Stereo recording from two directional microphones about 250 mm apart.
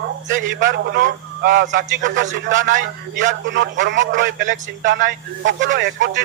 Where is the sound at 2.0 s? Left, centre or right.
Right.